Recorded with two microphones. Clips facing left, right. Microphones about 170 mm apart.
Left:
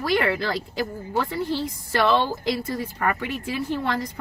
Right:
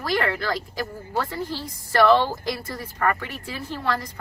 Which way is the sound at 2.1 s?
20° left (ahead or behind).